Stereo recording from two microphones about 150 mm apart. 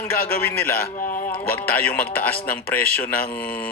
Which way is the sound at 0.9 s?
60° left (ahead or behind).